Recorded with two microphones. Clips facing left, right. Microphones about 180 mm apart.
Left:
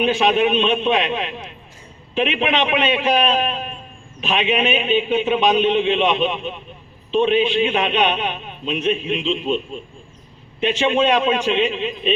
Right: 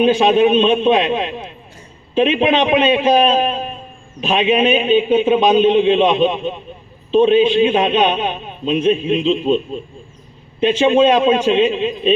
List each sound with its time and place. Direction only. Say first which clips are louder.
0.0 s a man's voice: right 5 dB; 35° right (ahead or behind)